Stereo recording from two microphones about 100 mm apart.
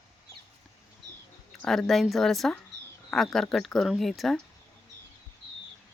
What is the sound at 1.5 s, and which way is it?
Speech, 5° left (ahead or behind).